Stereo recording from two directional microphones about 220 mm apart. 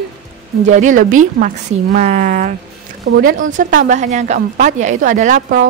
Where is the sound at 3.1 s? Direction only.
60° right (ahead or behind).